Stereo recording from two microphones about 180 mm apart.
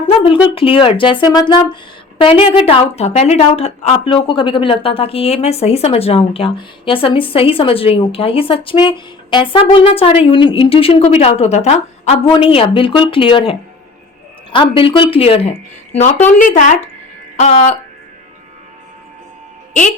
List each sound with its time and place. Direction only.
0.4 s speech: 30° left (ahead or behind)
16.4 s speech: 45° left (ahead or behind)